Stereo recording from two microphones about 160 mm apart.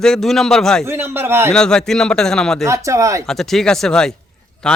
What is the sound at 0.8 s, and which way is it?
Speech, 15° right (ahead or behind).